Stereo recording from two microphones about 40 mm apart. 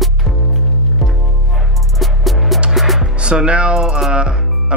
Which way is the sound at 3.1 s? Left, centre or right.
Right.